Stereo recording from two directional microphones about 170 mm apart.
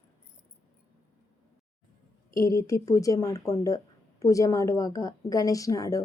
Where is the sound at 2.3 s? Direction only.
20° left (ahead or behind).